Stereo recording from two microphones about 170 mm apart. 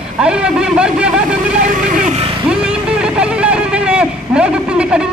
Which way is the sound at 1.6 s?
50° right (ahead or behind).